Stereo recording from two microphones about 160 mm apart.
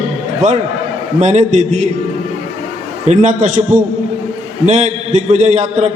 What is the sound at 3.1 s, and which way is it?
A man's voice, 50° right (ahead or behind).